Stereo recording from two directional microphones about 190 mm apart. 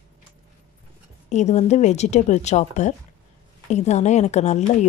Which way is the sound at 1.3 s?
35° left (ahead or behind).